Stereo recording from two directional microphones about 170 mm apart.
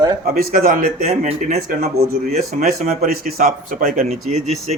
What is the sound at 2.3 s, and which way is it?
Speech, 55° right (ahead or behind).